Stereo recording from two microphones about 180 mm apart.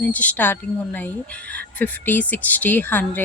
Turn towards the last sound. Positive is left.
turn(degrees=10)  # may be behind; listen again after turning